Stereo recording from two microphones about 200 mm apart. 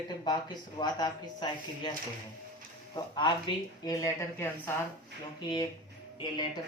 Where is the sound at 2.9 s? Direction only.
20° left (ahead or behind).